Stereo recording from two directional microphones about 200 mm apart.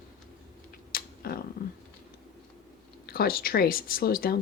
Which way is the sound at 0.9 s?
50° left (ahead or behind).